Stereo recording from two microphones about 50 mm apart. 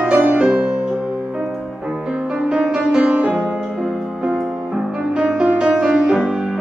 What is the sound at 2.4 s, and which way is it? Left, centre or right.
Music, centre.